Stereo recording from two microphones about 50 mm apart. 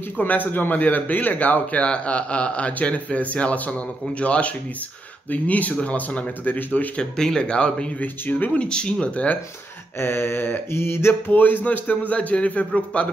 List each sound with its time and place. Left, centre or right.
0.2 s a man's voice: left
7.0 s speech: centre
8.0 s a man's voice: left
8.5 s speech: centre
9.9 s a sound: left
10.7 s mantra: left
11.2 s a man's voice: left